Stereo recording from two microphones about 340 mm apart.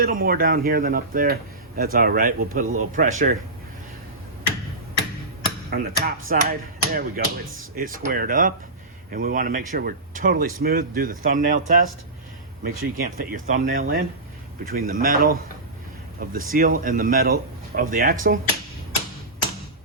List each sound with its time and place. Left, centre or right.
0.0 s speech: right
5.7 s speech: right